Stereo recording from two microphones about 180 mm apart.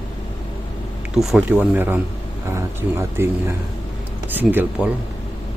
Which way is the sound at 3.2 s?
15° right (ahead or behind).